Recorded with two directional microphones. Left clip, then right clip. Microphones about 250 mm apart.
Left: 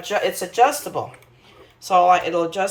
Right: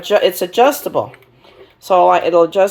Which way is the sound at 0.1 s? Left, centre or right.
Right.